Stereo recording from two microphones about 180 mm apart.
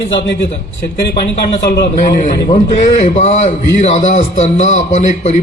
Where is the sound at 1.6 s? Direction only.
65° left (ahead or behind).